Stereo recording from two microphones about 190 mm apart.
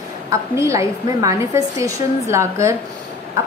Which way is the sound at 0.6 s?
15° right (ahead or behind).